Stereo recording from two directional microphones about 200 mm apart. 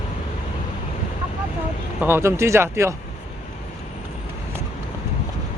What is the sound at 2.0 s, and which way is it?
Speech, 10° right (ahead or behind).